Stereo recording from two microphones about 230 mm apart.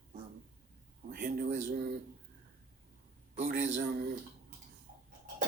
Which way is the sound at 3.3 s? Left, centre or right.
Right.